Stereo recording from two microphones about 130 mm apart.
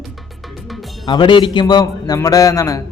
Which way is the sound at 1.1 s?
35° left (ahead or behind).